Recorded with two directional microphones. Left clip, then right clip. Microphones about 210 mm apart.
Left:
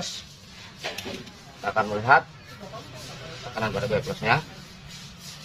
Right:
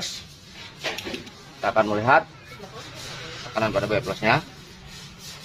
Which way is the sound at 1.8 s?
45° right (ahead or behind).